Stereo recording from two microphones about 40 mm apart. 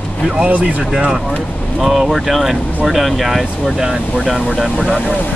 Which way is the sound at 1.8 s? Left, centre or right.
Centre.